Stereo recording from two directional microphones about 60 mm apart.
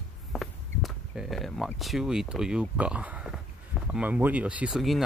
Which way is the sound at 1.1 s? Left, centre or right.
Centre.